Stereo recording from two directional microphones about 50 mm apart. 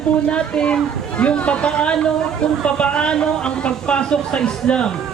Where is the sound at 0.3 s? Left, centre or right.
Left.